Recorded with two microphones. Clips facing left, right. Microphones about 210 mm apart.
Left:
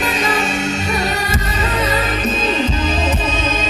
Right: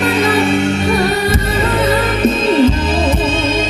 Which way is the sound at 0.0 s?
60° right (ahead or behind).